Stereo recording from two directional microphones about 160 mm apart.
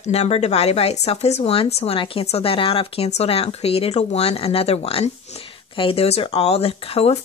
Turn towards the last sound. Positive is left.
turn(degrees=40)  # may be behind; listen again after turning